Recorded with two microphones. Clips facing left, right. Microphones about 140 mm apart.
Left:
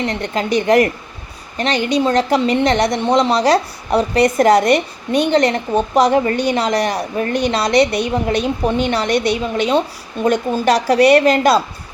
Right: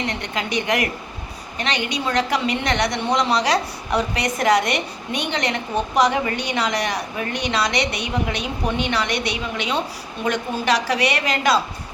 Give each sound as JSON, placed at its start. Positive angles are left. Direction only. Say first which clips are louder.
{"t": 0.1, "sound": "a woman's voice", "louder": "left 7 dB", "side_deg": 30}
{"t": 10.2, "sound": "a woman's voice", "louder": "left 6 dB", "side_deg": 35}